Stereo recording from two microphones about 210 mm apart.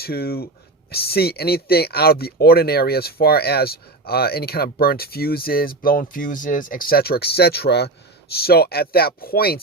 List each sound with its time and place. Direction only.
0.0 s speech: 45° left (ahead or behind)